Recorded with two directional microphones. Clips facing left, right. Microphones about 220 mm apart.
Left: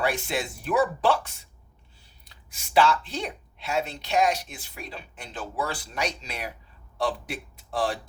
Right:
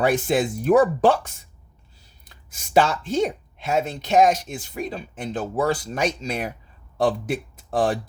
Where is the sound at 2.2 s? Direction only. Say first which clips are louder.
Right 3 dB; 50° right (ahead or behind).